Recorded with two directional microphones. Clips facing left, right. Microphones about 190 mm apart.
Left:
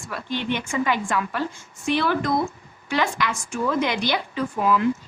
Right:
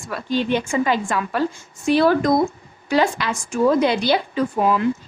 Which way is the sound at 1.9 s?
40° right (ahead or behind).